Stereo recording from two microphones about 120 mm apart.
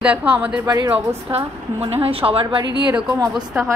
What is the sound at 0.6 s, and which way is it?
Speech, 30° right (ahead or behind).